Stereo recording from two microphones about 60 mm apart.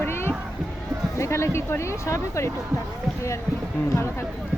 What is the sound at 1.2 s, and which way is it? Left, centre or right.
Speech, left.